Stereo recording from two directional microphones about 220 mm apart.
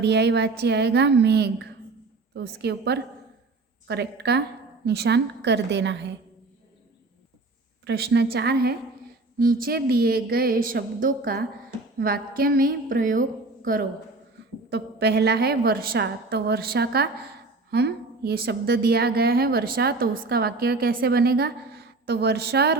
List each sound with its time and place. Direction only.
0.0 s a woman's voice: 50° right (ahead or behind)
7.9 s a woman's voice: 50° right (ahead or behind)
14.7 s a woman's voice: 50° right (ahead or behind)